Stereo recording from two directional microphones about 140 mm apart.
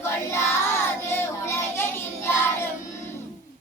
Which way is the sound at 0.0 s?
20° left (ahead or behind).